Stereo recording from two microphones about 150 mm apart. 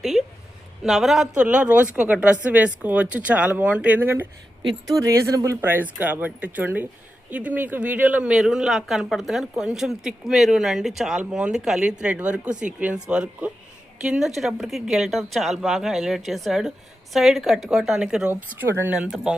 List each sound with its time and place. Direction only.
0.0 s a woman's voice: centre (ahead or behind)
18.9 s speech: 5° right (ahead or behind)